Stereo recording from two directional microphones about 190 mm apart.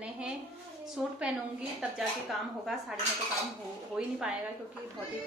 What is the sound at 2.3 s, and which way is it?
Speech, centre (ahead or behind).